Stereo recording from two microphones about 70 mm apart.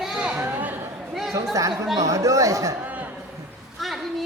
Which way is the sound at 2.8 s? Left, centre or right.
Right.